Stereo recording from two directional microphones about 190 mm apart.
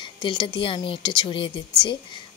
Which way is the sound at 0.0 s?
25° left (ahead or behind).